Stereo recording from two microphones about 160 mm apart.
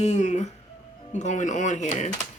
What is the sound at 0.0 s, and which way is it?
Speech, 45° left (ahead or behind).